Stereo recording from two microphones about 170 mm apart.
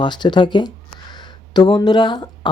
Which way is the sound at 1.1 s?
25° left (ahead or behind).